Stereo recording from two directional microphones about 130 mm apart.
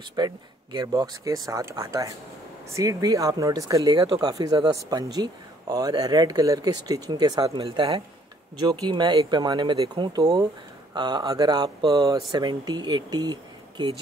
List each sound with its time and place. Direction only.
0.1 s speech: 30° right (ahead or behind)